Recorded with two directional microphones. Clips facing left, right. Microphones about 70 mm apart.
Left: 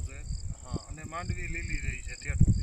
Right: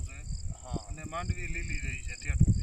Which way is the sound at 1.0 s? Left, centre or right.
Left.